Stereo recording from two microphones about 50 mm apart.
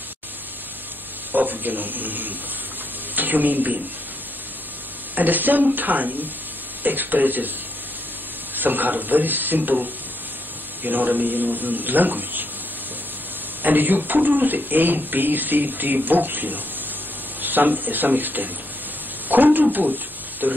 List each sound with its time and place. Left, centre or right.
1.3 s speech: right
5.1 s speech: right
8.5 s speech: right
13.6 s speech: right